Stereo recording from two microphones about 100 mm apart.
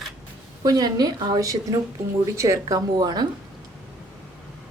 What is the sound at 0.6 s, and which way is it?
A woman's voice, 40° right (ahead or behind).